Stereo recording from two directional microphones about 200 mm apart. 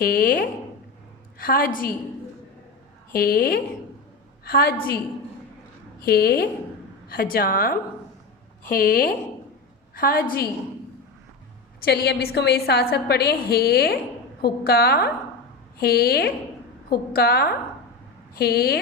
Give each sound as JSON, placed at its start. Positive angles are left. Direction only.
{"t": 0.0, "sound": "a woman's voice", "side_deg": 45}
{"t": 3.1, "sound": "a woman's voice", "side_deg": 50}
{"t": 6.0, "sound": "a woman's voice", "side_deg": 50}
{"t": 11.8, "sound": "a woman's voice", "side_deg": 55}